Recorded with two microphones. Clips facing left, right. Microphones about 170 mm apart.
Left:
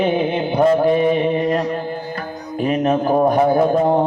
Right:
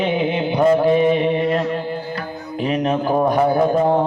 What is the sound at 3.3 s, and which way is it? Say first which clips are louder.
Speech: left 1 dB; 50° left (ahead or behind).